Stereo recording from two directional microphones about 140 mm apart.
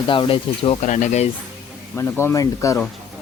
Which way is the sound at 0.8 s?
60° left (ahead or behind).